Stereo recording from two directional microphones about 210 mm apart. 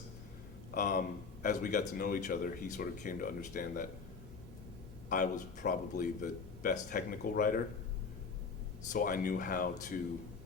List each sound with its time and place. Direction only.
0.7 s speech: 40° left (ahead or behind)
5.0 s speech: 40° left (ahead or behind)
8.9 s speech: 40° left (ahead or behind)